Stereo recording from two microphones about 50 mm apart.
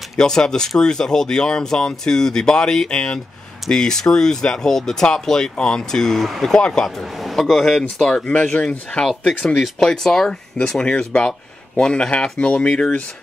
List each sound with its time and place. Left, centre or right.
0.2 s speech: centre